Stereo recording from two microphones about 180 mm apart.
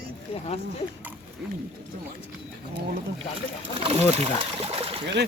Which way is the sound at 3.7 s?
35° right (ahead or behind).